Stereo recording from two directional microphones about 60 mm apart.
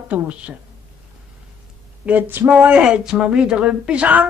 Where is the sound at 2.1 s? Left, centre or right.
Right.